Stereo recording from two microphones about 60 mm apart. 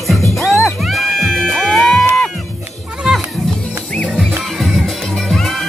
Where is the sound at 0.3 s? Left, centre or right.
Centre.